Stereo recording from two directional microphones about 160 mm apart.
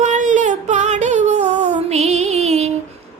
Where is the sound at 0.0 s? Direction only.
50° right (ahead or behind).